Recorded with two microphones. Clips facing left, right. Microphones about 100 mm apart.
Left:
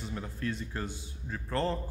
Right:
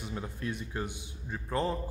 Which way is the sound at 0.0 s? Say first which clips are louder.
Left 1 dB; 15° right (ahead or behind).